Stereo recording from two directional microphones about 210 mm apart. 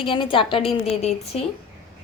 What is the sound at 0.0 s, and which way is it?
A woman's voice, 25° left (ahead or behind).